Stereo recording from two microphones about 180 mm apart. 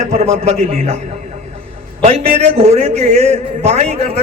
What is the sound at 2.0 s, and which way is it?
A man's voice, 35° right (ahead or behind).